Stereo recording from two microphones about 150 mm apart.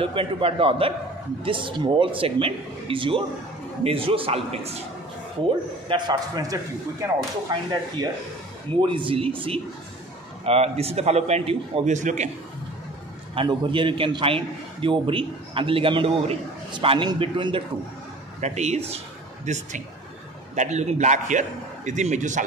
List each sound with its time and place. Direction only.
0.0 s a man's voice: 40° right (ahead or behind)
5.9 s speech: 30° right (ahead or behind)
8.8 s a man's voice: 35° right (ahead or behind); by 12.3 s 55° right (ahead or behind)
13.3 s a man's voice: 35° right (ahead or behind)
18.4 s a man's voice: 50° right (ahead or behind)